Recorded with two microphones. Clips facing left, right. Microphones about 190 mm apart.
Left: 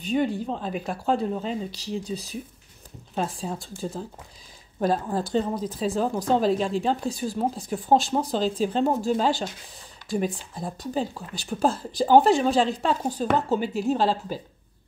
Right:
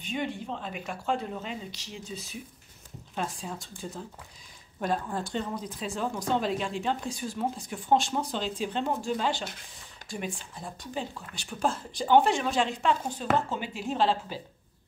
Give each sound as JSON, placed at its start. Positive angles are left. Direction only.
{"t": 0.0, "sound": "speech", "side_deg": 35}